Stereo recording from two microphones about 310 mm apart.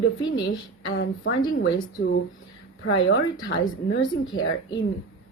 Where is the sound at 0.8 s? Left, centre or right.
Left.